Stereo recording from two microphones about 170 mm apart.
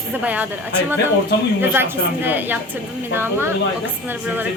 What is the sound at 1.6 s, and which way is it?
A woman's voice, 15° right (ahead or behind).